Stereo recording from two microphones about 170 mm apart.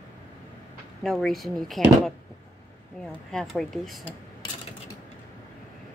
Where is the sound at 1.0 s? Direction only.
Centre (ahead or behind).